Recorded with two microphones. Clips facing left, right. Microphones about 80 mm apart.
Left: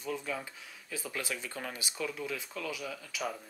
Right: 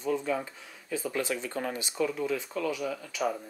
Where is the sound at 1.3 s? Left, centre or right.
Centre.